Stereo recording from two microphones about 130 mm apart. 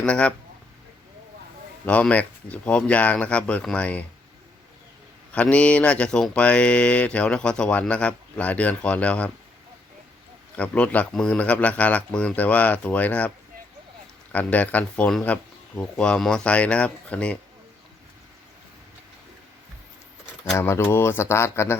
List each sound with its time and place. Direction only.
0.0 s mantra: 10° left (ahead or behind)
1.8 s mantra: 10° left (ahead or behind)
5.3 s mantra: 10° left (ahead or behind)
10.5 s mantra: 10° left (ahead or behind)
14.3 s mantra: 10° left (ahead or behind)
20.6 s speech: 20° left (ahead or behind)